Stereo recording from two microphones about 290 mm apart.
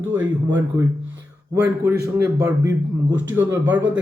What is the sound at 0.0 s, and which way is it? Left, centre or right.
A man's voice, centre.